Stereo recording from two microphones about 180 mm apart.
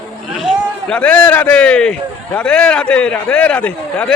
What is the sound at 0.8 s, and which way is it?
A man's voice, 5° left (ahead or behind).